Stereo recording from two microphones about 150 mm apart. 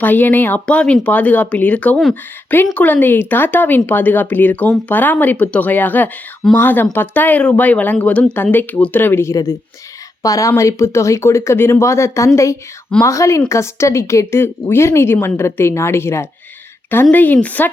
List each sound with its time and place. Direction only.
0.0 s a woman's voice: 10° left (ahead or behind)